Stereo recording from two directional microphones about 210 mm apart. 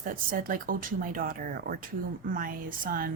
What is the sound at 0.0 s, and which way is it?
A woman's voice, 40° right (ahead or behind).